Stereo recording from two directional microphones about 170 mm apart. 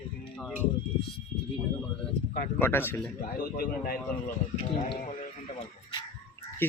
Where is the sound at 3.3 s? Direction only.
60° left (ahead or behind).